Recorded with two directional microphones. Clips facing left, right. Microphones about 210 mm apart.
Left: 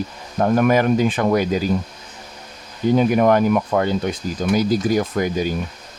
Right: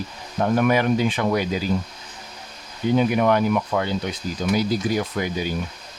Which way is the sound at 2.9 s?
45° left (ahead or behind).